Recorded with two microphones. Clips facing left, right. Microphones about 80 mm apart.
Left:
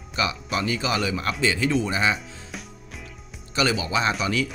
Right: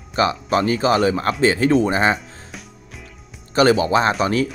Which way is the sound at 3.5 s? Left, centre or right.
Right.